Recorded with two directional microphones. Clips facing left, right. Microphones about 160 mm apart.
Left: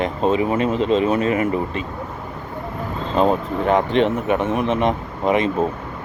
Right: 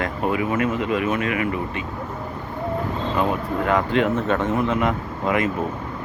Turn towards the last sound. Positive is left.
turn(degrees=20)  # may be behind; listen again after turning